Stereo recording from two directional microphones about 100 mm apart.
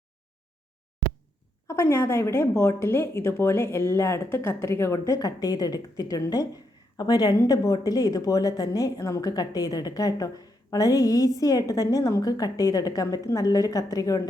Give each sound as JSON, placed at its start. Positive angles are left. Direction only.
{"t": 1.6, "sound": "speech", "side_deg": 30}